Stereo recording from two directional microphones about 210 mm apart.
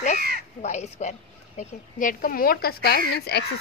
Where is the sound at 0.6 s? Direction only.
30° left (ahead or behind).